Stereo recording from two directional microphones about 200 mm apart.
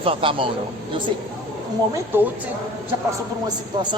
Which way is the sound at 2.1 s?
10° right (ahead or behind).